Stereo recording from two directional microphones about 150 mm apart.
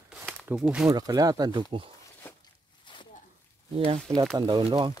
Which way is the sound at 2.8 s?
30° left (ahead or behind).